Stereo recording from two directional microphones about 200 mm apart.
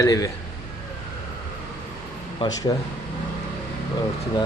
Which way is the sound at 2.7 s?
20° left (ahead or behind).